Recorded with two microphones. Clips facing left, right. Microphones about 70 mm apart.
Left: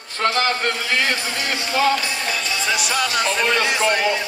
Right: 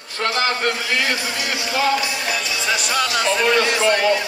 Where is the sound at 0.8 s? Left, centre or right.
Left.